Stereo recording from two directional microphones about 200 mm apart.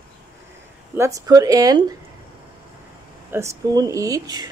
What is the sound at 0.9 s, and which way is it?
Speech, 15° right (ahead or behind).